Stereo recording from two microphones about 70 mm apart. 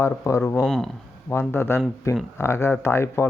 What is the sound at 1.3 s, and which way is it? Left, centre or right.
Speech, left.